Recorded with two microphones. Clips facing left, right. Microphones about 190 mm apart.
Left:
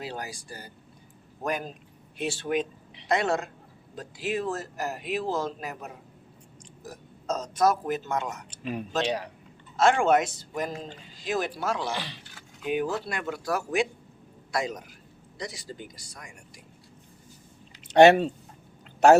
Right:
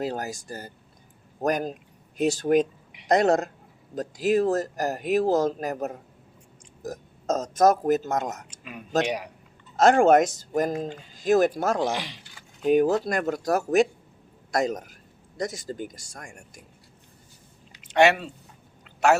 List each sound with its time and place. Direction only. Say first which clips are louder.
0.0 s speech: right 7 dB; 45° right (ahead or behind)
8.4 s speech: left 8 dB; 30° left (ahead or behind)
9.0 s speech: even; 10° right (ahead or behind)
9.7 s speech: right 5 dB; 40° right (ahead or behind)
11.9 s speech: right 2 dB; 15° right (ahead or behind)
12.6 s speech: right 8 dB; 40° right (ahead or behind)
17.8 s speech: left 4 dB; 35° left (ahead or behind)